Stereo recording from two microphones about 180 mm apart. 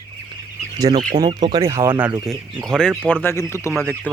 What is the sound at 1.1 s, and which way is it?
Speech, 40° right (ahead or behind).